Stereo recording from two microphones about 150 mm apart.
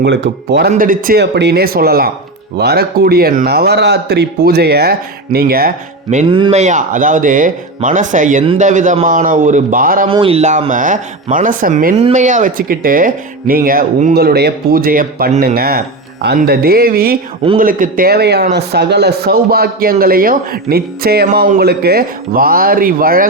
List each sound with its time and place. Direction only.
0.5 s speech: 80° right
6.2 s a man's voice: 35° right (ahead or behind)
6.5 s speech: 55° right (ahead or behind); by 10.1 s 70° right (ahead or behind)
10.1 s speech: 35° right (ahead or behind); by 11.9 s 65° right (ahead or behind)
11.9 s speech: 50° right (ahead or behind); by 17.2 s 80° right
17.6 s speech: 70° right (ahead or behind)